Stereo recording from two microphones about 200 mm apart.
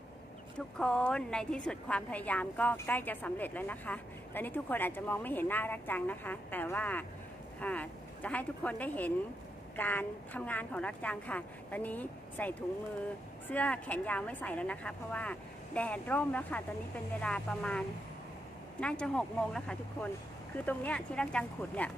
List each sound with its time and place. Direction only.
0.8 s a woman's voice: 5° left (ahead or behind)